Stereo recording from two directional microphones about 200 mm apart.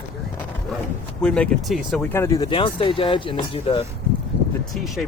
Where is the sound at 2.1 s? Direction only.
15° left (ahead or behind).